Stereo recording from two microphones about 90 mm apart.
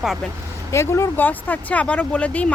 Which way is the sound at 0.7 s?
30° left (ahead or behind).